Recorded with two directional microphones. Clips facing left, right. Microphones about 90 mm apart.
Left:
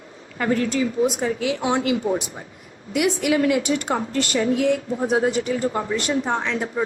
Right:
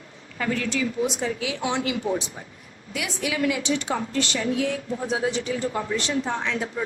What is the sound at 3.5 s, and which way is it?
Speech, 50° left (ahead or behind).